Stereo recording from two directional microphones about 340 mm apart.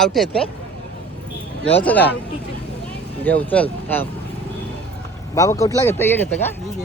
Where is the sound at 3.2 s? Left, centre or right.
Centre.